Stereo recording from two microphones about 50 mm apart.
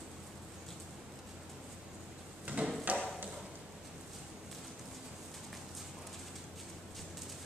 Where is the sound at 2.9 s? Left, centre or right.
Right.